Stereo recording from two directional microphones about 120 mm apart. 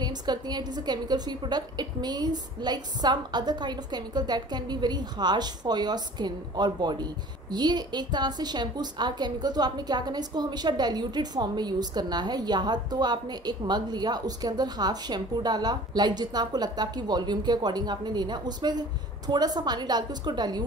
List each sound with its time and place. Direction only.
0.0 s a woman's voice: 35° right (ahead or behind)